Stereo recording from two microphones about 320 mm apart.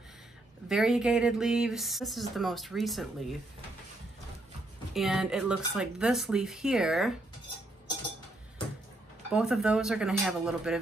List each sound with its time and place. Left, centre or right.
0.7 s speech: centre
4.9 s speech: centre
9.3 s speech: centre